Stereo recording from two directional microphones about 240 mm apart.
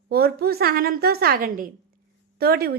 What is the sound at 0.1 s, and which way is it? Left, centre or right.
A woman's voice, right.